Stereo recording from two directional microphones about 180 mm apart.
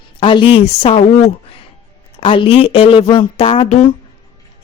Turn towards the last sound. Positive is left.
turn(degrees=35)  # may be behind; listen again after turning